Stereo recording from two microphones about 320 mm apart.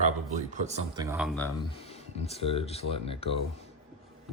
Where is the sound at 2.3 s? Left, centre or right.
Centre.